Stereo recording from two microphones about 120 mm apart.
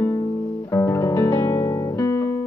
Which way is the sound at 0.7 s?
25° left (ahead or behind).